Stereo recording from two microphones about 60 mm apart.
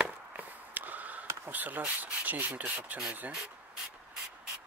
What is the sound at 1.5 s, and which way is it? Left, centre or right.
Speech, right.